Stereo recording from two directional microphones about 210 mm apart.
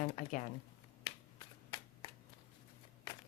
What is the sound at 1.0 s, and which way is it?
Finger snapping, 20° left (ahead or behind).